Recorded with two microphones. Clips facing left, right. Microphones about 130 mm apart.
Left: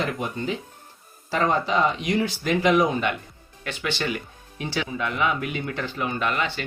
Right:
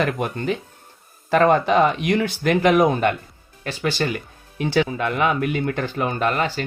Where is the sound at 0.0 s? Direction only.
60° right (ahead or behind).